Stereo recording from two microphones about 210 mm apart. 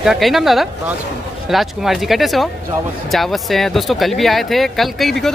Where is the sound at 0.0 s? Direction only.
Centre (ahead or behind).